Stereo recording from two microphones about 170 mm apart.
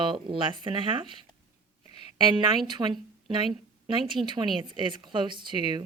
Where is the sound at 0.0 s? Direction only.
30° right (ahead or behind).